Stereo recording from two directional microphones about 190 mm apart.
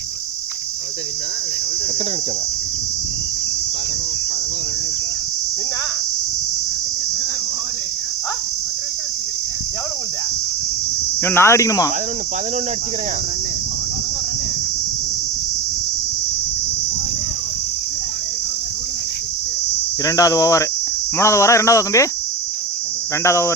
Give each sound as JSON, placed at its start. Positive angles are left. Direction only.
{"t": 11.2, "sound": "speech", "side_deg": 10}
{"t": 20.1, "sound": "speech", "side_deg": 20}
{"t": 23.2, "sound": "speech", "side_deg": 15}